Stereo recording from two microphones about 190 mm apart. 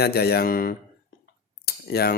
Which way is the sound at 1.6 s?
55° left (ahead or behind).